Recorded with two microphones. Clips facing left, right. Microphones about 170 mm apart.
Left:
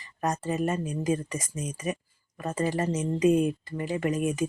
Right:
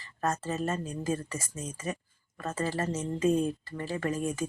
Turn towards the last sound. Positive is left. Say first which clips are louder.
# left 4 dB
turn(degrees=20)  # may be behind; listen again after turning